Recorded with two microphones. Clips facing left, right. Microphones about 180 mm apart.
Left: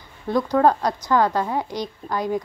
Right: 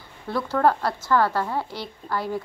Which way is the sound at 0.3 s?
15° left (ahead or behind).